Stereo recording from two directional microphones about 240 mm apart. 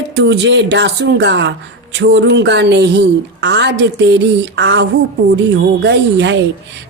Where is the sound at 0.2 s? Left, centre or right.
Right.